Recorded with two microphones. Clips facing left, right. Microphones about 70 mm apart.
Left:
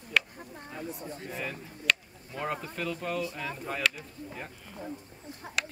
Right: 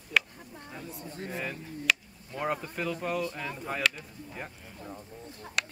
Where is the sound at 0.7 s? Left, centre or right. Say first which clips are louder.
Left 3 dB; left.